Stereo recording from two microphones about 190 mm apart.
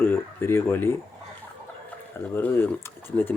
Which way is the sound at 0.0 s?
10° left (ahead or behind).